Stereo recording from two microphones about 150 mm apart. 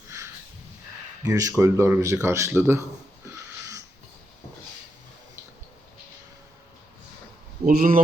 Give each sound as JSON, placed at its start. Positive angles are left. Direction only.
{"t": 1.2, "sound": "speech", "side_deg": -20}
{"t": 7.6, "sound": "speech", "side_deg": -70}